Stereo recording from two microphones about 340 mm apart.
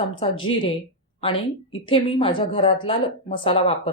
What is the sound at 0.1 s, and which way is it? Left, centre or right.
A woman's voice, centre.